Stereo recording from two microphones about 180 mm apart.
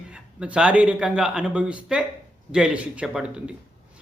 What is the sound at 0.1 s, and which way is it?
Speech, 5° right (ahead or behind).